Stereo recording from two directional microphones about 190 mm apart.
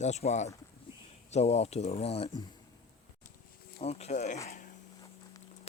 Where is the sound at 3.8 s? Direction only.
35° left (ahead or behind).